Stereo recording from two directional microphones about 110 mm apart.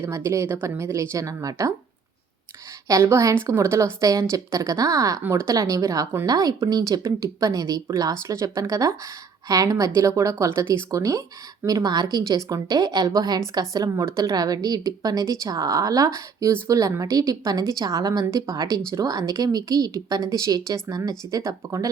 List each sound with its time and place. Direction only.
0.0 s speech: 25° right (ahead or behind)
2.8 s speech: 25° right (ahead or behind)